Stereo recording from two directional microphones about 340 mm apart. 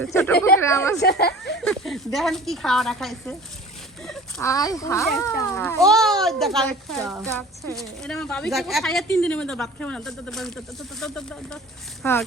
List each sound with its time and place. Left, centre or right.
0.0 s a woman's voice: centre
1.0 s speech: left
1.6 s a woman's voice: centre